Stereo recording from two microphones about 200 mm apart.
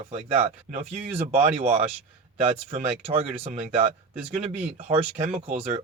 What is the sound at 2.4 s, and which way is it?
Speech, 30° right (ahead or behind).